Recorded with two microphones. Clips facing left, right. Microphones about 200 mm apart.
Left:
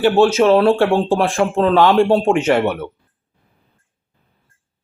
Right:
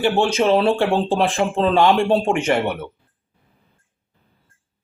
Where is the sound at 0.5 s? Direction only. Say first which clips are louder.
Left 4 dB; 55° left (ahead or behind).